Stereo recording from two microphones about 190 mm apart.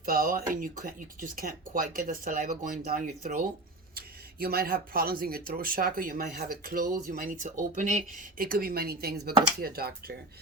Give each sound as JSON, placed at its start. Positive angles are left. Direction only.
{"t": 0.0, "sound": "speech", "side_deg": -50}